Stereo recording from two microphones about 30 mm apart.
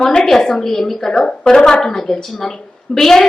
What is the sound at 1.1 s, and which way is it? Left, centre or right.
A woman's voice, left.